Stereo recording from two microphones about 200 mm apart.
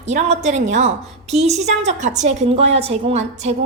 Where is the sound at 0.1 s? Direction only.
35° right (ahead or behind).